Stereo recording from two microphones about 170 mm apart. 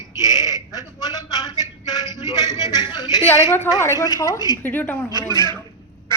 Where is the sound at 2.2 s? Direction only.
20° right (ahead or behind).